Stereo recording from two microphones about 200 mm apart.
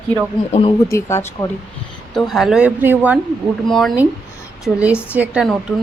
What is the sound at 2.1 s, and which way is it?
Speech, centre (ahead or behind).